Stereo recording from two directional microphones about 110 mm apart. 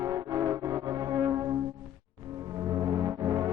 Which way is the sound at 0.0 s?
30° right (ahead or behind).